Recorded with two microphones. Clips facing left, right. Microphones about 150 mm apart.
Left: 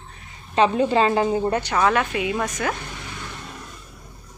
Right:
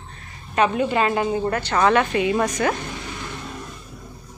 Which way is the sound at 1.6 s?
5° left (ahead or behind).